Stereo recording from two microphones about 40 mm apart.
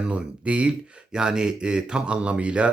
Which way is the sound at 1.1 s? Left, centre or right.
Right.